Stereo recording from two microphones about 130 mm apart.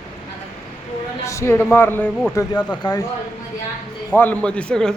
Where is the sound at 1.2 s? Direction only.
20° left (ahead or behind).